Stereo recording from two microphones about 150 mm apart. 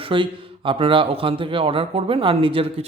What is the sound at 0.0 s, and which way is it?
A man's voice, 35° right (ahead or behind).